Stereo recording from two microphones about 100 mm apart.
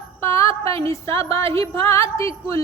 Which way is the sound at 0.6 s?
70° right (ahead or behind).